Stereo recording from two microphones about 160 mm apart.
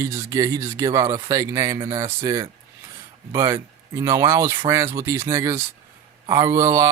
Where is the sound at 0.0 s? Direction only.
20° right (ahead or behind).